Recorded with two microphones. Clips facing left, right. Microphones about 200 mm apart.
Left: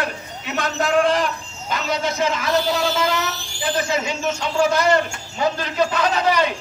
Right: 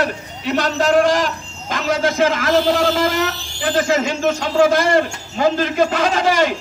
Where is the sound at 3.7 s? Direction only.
90° right.